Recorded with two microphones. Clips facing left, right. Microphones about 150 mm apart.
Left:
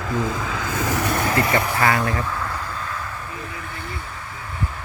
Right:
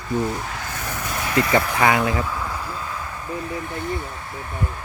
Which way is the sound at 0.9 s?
85° left.